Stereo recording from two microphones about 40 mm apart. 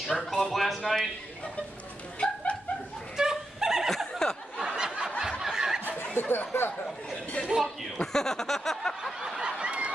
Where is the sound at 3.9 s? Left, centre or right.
Centre.